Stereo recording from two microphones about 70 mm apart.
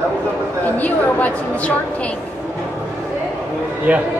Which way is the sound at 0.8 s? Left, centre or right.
Left.